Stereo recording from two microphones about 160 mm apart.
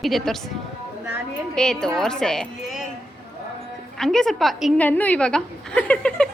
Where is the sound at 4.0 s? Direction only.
5° left (ahead or behind).